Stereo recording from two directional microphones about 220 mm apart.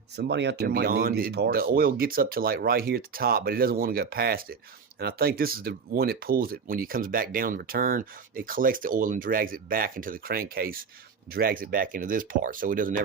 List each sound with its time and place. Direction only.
0.2 s speech: 50° right (ahead or behind)